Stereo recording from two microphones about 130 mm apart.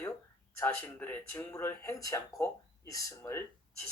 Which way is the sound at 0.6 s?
15° left (ahead or behind).